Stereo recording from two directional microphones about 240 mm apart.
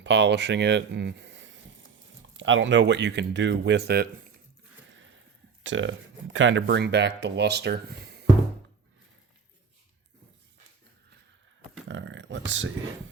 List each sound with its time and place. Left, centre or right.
0.0 s speech: right
5.6 s speech: right
11.9 s a sound: right